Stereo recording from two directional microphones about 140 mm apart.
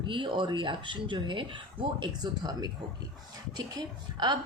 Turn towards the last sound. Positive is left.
turn(degrees=-30)  # may be behind; listen again after turning